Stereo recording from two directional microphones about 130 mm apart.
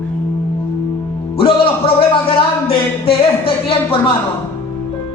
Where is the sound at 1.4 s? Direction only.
45° left (ahead or behind).